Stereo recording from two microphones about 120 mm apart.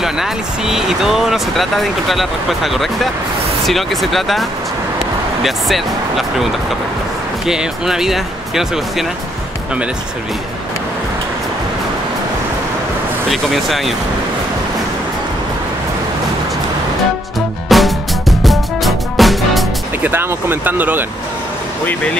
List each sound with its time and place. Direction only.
0.0 s speech: 5° right (ahead or behind)
7.4 s speech: 5° right (ahead or behind)
13.3 s speech: centre (ahead or behind)
17.6 s music: centre (ahead or behind)
20.0 s speech: 20° right (ahead or behind)